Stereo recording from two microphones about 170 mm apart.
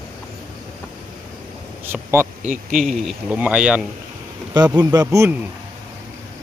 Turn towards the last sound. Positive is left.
turn(degrees=-15)  # may be behind; listen again after turning